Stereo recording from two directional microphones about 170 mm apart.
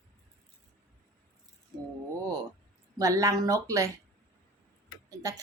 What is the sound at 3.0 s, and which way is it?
Speech, 20° right (ahead or behind).